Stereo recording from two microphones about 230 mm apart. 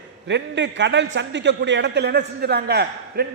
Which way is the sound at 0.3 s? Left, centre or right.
Right.